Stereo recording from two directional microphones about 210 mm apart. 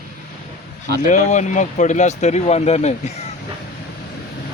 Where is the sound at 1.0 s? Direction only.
35° left (ahead or behind).